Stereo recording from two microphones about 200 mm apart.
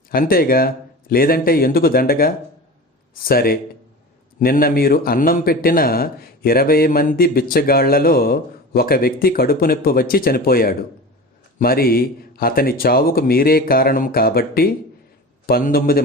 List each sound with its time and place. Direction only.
0.1 s a man's voice: 45° left (ahead or behind)